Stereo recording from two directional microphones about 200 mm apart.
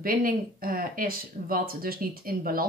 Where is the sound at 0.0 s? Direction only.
45° right (ahead or behind).